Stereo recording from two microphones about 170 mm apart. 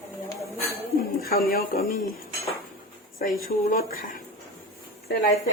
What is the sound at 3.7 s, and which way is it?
Speech, 55° left (ahead or behind).